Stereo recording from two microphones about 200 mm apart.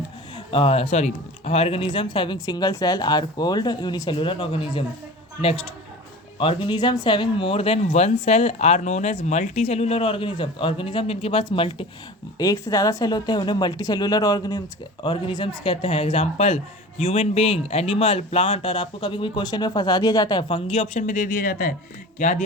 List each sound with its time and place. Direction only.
0.3 s speech: 25° left (ahead or behind)
6.4 s speech: 25° left (ahead or behind)